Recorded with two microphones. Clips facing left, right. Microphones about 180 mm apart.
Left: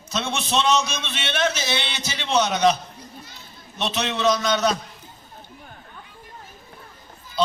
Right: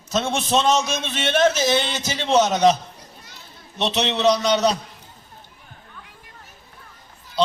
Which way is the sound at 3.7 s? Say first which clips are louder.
Right 3 dB; 35° right (ahead or behind).